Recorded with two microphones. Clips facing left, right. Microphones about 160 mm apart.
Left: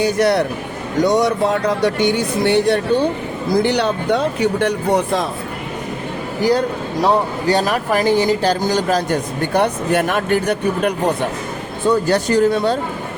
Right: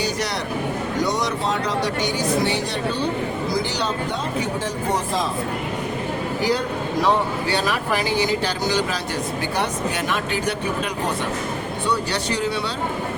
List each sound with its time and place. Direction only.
0.0 s speech: 55° left (ahead or behind)
7.0 s speech: 40° left (ahead or behind)